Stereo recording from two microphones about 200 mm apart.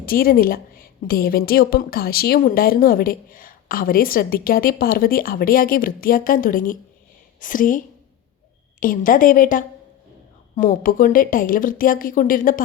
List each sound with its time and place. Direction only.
0.0 s a woman's voice: 45° left (ahead or behind)
8.8 s a woman's voice: 45° left (ahead or behind)